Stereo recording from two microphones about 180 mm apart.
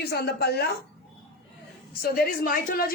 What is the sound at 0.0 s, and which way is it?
Speech, 65° left (ahead or behind).